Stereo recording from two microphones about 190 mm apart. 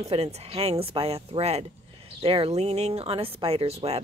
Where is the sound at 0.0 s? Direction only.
35° right (ahead or behind).